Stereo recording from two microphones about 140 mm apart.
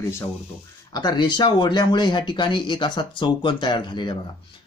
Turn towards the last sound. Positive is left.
turn(degrees=35)  # may be behind; listen again after turning